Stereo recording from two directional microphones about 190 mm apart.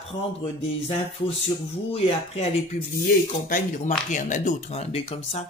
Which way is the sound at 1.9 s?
30° left (ahead or behind).